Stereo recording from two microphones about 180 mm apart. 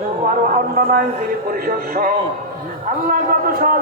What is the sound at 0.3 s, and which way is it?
Speech, 50° right (ahead or behind).